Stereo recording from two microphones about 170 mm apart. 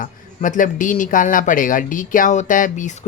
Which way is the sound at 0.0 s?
50° left (ahead or behind).